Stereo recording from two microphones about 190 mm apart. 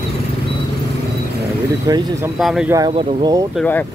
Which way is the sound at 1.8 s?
20° right (ahead or behind).